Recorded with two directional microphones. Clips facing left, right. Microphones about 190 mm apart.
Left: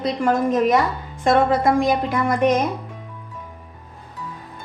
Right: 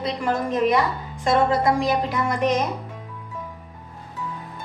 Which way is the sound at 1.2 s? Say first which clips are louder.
Left 2 dB; 50° left (ahead or behind).